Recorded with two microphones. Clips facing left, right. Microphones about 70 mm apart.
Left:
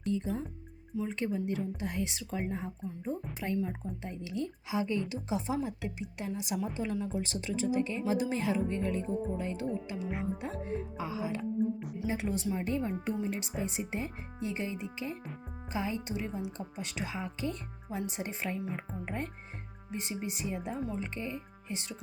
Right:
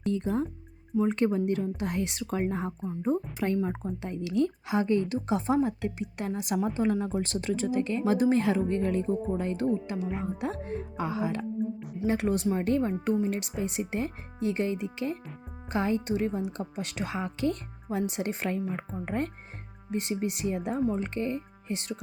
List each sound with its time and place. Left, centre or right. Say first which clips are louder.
0.0 s a woman's voice: right 5 dB; right
10.4 s a woman's voice: right 4 dB; right